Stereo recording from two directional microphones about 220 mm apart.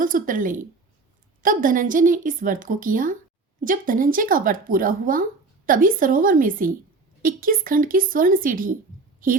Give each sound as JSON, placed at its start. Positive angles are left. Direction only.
{"t": 0.0, "sound": "a woman's voice", "side_deg": -40}